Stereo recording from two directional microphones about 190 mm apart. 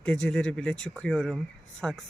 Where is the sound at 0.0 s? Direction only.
5° left (ahead or behind).